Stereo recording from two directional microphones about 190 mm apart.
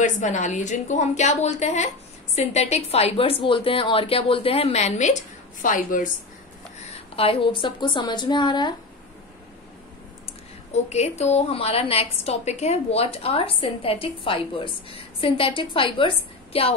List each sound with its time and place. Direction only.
0.0 s a woman's voice: 40° left (ahead or behind)
7.2 s speech: 30° left (ahead or behind)
10.2 s a woman's voice: 35° left (ahead or behind)